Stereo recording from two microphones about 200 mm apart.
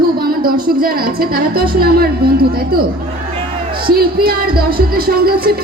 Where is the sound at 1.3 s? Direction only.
50° right (ahead or behind).